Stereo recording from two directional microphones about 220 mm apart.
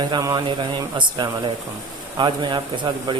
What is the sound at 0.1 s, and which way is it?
Speech, 20° right (ahead or behind).